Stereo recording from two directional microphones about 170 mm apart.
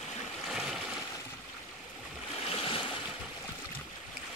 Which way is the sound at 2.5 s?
35° left (ahead or behind).